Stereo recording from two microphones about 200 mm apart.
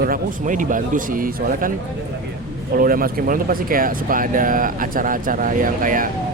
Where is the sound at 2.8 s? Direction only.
45° right (ahead or behind).